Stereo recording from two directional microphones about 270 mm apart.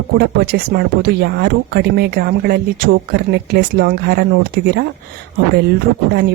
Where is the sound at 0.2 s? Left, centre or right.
Right.